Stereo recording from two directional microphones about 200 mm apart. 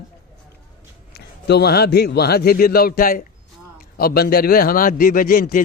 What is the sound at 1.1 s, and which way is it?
A man's voice, 55° left (ahead or behind).